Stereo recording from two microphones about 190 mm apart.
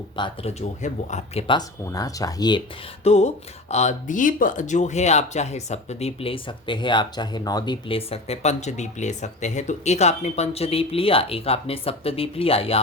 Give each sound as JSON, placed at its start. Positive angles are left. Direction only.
{"t": 0.2, "sound": "speech", "side_deg": 35}